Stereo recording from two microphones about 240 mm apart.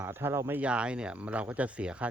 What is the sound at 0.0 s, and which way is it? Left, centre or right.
Speech, centre.